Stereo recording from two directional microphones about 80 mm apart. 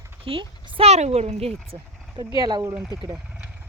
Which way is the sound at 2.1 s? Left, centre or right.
Right.